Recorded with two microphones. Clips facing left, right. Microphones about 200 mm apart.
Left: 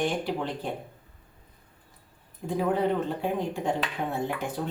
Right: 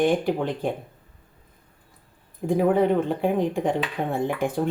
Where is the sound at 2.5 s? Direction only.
55° right (ahead or behind).